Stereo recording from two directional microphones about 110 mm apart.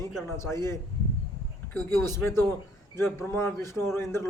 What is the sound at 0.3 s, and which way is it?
Speech, 25° left (ahead or behind).